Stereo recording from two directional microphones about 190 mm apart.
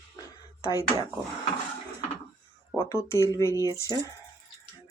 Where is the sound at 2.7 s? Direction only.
15° left (ahead or behind).